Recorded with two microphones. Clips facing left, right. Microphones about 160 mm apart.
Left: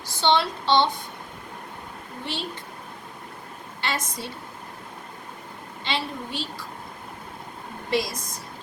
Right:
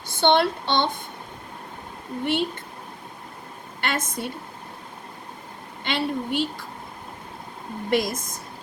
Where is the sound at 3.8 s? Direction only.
50° right (ahead or behind).